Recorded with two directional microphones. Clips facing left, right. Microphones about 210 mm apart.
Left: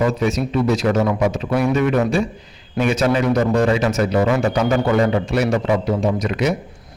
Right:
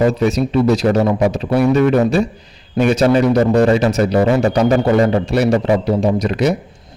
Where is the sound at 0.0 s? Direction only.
35° right (ahead or behind).